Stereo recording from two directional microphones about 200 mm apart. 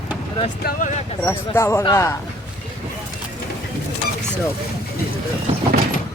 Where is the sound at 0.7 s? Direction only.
50° left (ahead or behind).